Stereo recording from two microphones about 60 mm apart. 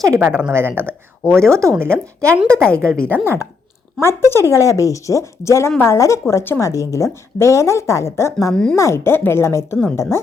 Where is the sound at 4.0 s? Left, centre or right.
Left.